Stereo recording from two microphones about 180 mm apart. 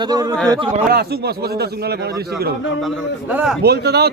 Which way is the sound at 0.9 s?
60° right (ahead or behind).